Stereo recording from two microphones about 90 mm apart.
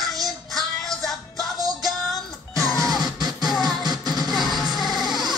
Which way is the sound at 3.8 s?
50° right (ahead or behind).